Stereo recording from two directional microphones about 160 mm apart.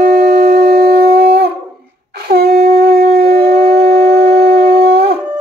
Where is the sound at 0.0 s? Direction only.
75° right (ahead or behind).